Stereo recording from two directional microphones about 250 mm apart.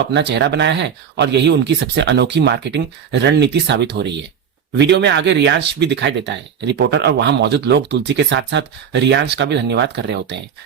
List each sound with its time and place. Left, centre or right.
0.1 s speech: right